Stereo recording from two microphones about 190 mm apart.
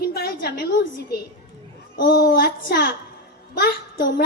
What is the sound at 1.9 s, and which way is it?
A child's voice, 70° left (ahead or behind).